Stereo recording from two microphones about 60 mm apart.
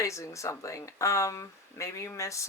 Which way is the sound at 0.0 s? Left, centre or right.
Left.